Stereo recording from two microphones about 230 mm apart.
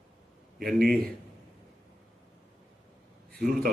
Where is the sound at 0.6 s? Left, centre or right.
Right.